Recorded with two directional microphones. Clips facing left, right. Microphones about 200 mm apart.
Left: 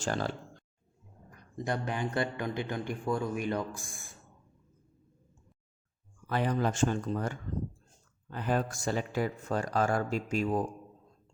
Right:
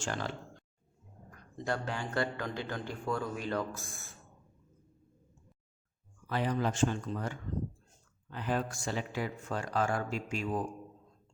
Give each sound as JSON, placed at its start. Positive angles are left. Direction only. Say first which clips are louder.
{"t": 0.0, "sound": "speech", "louder": "left 4 dB", "side_deg": 40}
{"t": 1.6, "sound": "a man's voice", "louder": "left 2 dB", "side_deg": 15}
{"t": 6.2, "sound": "speech", "louder": "left 2 dB", "side_deg": 50}